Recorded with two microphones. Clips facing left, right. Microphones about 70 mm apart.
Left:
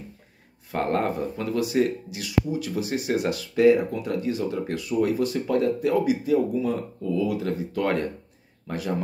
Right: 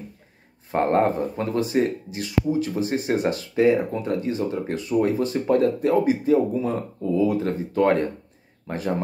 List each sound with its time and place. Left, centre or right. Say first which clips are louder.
0.7 s speech: right 5 dB; right